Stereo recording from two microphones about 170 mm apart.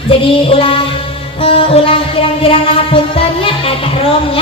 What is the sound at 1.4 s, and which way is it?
Music, 35° left (ahead or behind).